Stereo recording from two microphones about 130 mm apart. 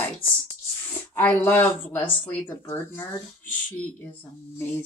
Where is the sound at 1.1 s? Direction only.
15° left (ahead or behind).